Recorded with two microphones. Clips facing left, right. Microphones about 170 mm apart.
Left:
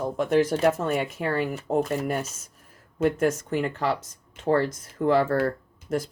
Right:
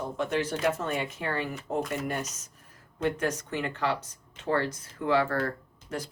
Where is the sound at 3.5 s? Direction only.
35° left (ahead or behind).